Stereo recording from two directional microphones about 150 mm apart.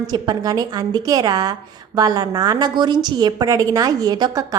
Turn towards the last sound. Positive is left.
turn(degrees=-25)  # may be behind; listen again after turning